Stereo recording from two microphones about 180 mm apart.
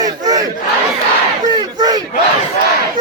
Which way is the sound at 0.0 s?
20° right (ahead or behind).